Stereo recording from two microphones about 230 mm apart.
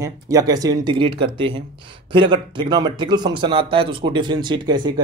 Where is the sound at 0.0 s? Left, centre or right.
Centre.